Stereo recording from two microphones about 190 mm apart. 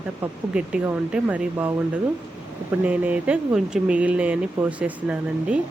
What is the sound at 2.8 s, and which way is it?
Speech, 5° right (ahead or behind).